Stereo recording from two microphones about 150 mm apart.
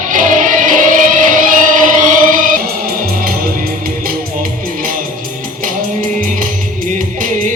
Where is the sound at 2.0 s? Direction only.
65° right (ahead or behind).